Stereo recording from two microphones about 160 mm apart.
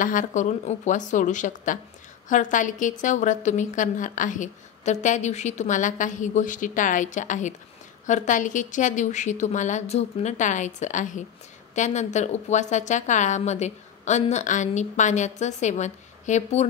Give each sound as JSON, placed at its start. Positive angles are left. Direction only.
{"t": 0.0, "sound": "a woman's voice", "side_deg": 55}